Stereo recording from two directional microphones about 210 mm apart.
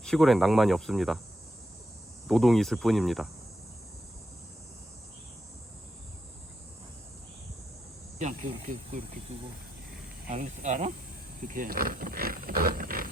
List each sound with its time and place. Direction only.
0.0 s speech: centre (ahead or behind)
2.2 s speech: centre (ahead or behind)
8.2 s speech: 35° right (ahead or behind)